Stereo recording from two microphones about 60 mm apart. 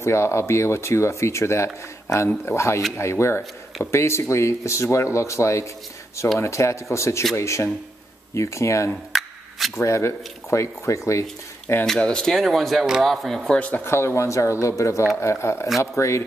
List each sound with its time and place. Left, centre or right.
0.0 s speech: left
9.1 s a sound: centre
9.8 s speech: left
11.8 s speech: centre
13.6 s speech: left
13.8 s speech: left